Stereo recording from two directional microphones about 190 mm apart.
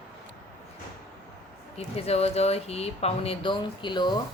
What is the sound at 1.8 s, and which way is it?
A woman's voice, 35° left (ahead or behind).